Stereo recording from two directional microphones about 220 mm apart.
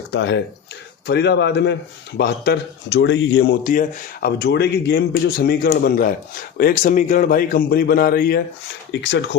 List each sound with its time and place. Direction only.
0.1 s a man's voice: 55° left (ahead or behind)